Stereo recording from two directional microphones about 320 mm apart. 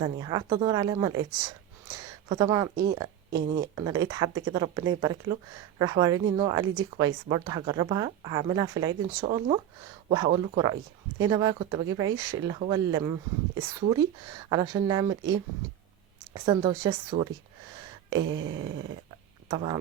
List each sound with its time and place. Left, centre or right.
0.0 s speech: centre
2.3 s speech: centre
16.3 s speech: centre
18.2 s a sound: right
19.5 s speech: centre